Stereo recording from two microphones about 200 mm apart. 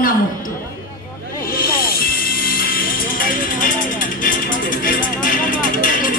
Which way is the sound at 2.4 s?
45° left (ahead or behind).